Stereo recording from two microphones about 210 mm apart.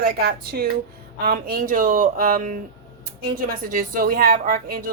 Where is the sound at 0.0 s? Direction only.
45° right (ahead or behind).